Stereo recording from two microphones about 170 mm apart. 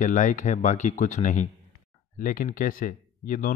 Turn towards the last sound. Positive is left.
turn(degrees=55)  # may be behind; listen again after turning